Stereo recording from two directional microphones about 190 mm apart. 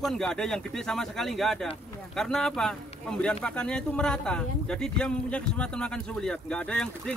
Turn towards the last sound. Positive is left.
turn(degrees=5)  # may be behind; listen again after turning